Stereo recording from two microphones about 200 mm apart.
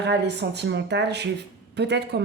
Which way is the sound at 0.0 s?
60° right (ahead or behind).